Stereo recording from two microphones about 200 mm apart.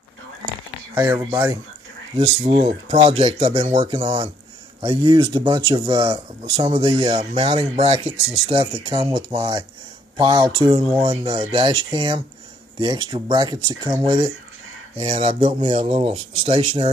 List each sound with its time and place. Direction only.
0.9 s speech: 15° right (ahead or behind)
2.1 s speech: 30° right (ahead or behind)